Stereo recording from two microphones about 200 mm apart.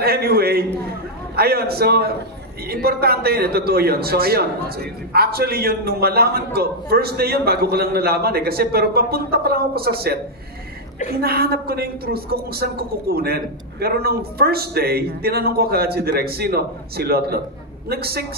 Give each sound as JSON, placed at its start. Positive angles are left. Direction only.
{"t": 0.0, "sound": "a man's voice", "side_deg": -50}
{"t": 11.1, "sound": "a man's voice", "side_deg": -50}